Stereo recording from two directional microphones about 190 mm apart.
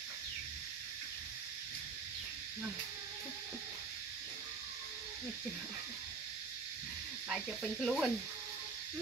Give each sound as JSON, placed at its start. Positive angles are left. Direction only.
{"t": 7.2, "sound": "speech", "side_deg": 0}